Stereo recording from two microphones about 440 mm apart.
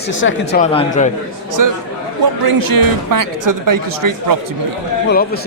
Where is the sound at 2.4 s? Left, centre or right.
Right.